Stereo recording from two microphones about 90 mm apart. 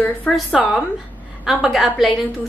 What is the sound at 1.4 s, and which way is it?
Speech, centre (ahead or behind).